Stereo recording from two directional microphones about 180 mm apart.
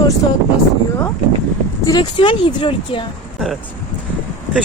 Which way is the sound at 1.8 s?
25° left (ahead or behind).